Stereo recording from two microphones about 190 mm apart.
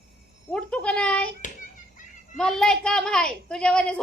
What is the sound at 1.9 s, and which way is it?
Children playing, 45° left (ahead or behind).